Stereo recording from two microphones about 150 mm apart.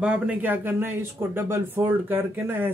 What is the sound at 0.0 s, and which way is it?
Speech, 10° right (ahead or behind).